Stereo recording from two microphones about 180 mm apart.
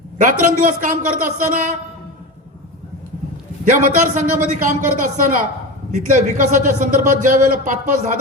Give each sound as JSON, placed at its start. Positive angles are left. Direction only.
{"t": 0.2, "sound": "a man's voice", "side_deg": -45}
{"t": 3.7, "sound": "a man's voice", "side_deg": -45}